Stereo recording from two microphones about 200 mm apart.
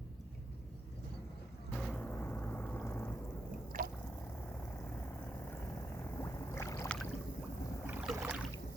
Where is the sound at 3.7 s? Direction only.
45° right (ahead or behind).